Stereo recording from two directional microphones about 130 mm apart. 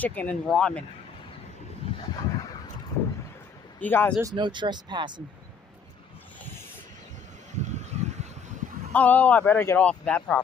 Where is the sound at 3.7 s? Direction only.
15° left (ahead or behind).